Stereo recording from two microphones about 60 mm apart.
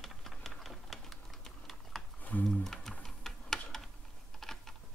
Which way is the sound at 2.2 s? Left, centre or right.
Left.